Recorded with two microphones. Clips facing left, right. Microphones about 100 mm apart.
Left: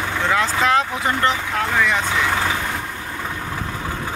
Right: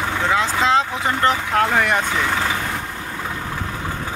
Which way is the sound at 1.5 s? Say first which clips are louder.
Right 2 dB; 55° right (ahead or behind).